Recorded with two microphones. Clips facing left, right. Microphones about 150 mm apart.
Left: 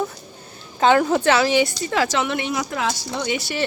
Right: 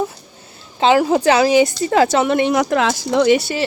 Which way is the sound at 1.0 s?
35° right (ahead or behind).